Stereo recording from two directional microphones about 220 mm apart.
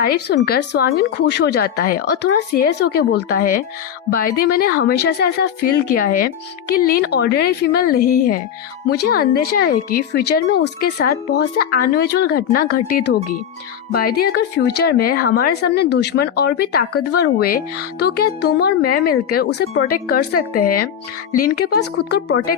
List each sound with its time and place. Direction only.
0.0 s speech: 40° left (ahead or behind)